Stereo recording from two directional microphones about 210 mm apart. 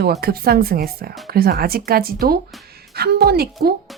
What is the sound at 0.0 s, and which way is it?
Speech, 50° right (ahead or behind).